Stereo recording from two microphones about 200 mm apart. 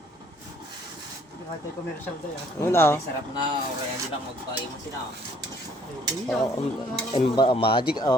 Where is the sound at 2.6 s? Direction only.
10° left (ahead or behind).